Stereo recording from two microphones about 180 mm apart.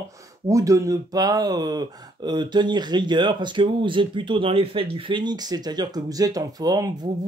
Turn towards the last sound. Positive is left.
turn(degrees=-20)  # may be behind; listen again after turning